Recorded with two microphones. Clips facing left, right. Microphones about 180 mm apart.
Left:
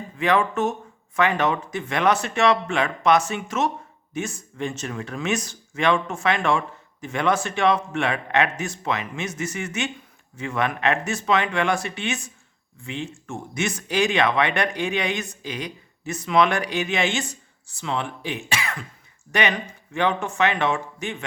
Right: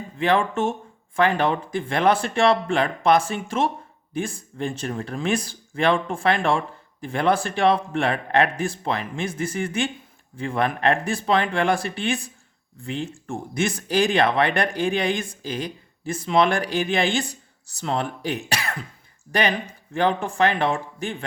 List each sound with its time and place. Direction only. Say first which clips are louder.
0.2 s speech: even; 30° right (ahead or behind)